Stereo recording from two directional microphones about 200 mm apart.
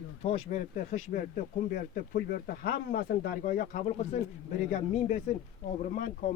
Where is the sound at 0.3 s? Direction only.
35° left (ahead or behind).